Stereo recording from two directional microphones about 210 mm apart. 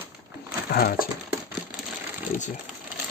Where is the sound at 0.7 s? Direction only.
45° left (ahead or behind).